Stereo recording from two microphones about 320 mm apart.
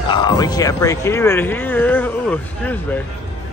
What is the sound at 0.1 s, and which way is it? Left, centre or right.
Speech, centre.